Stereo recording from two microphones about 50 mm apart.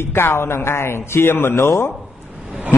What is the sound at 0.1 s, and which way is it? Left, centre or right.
A man's voice, left.